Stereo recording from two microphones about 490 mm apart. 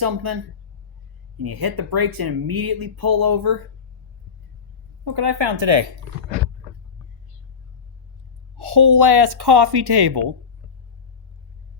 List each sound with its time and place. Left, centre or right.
0.0 s speech: right
1.4 s speech: right
5.0 s a woman's voice: right
8.6 s a sound: right
9.0 s speech: right